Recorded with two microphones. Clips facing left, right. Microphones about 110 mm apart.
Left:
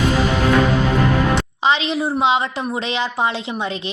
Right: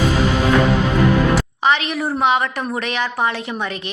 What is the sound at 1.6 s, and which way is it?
A woman's voice, 25° left (ahead or behind).